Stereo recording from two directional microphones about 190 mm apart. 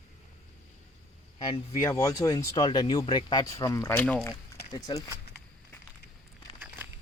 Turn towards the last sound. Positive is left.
turn(degrees=20)  # may be behind; listen again after turning